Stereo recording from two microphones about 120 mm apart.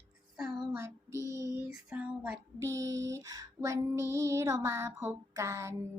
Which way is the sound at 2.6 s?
25° right (ahead or behind).